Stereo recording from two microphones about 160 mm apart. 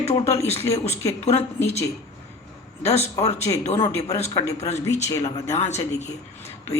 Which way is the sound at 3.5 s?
25° left (ahead or behind).